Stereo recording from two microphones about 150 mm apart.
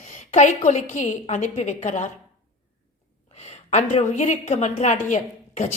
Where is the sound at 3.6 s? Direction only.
45° left (ahead or behind).